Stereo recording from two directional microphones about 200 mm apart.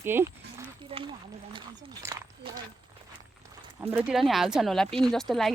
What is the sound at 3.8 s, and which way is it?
Speech, 10° right (ahead or behind).